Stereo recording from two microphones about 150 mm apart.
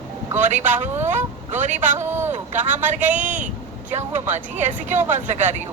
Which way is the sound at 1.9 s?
15° right (ahead or behind).